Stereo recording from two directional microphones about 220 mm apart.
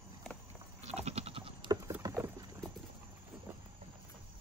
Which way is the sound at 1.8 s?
15° right (ahead or behind).